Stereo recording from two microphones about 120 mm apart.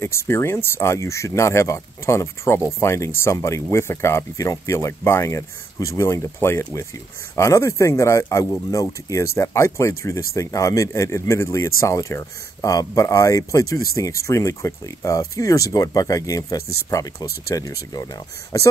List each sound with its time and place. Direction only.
0.0 s speech: 20° left (ahead or behind)